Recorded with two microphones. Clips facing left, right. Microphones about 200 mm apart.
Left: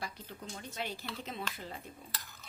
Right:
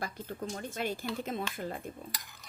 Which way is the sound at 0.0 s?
50° right (ahead or behind).